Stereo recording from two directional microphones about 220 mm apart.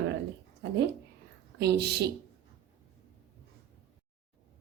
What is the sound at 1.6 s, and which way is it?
Speech, 50° right (ahead or behind).